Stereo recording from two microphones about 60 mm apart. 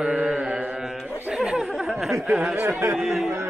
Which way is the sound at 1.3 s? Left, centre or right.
Centre.